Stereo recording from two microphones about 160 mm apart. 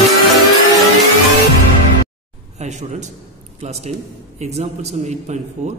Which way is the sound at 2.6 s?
45° right (ahead or behind).